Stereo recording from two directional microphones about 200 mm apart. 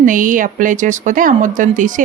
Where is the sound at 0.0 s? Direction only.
40° right (ahead or behind).